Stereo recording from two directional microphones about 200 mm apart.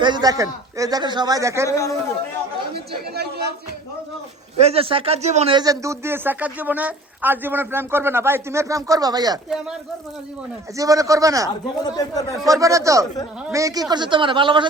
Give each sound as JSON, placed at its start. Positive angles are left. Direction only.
{"t": 0.0, "sound": "a man's voice", "side_deg": -20}
{"t": 2.7, "sound": "speech", "side_deg": -55}
{"t": 4.6, "sound": "speech", "side_deg": -30}
{"t": 10.8, "sound": "speech", "side_deg": -15}
{"t": 11.8, "sound": "speech", "side_deg": 20}
{"t": 12.5, "sound": "a man's voice", "side_deg": -15}